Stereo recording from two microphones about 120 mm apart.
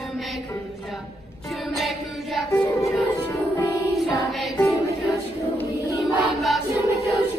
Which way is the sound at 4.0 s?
Centre (ahead or behind).